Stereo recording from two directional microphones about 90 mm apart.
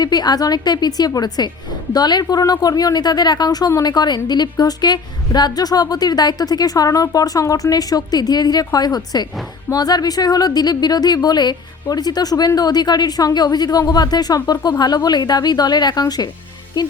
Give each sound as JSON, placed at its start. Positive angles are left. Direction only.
{"t": 0.0, "sound": "speech", "side_deg": 50}